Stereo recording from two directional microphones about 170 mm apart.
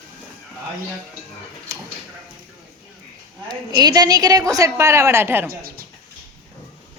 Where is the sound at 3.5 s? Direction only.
25° right (ahead or behind).